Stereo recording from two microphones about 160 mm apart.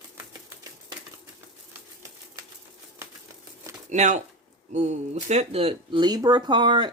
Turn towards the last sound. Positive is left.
turn(degrees=-30)  # may be behind; listen again after turning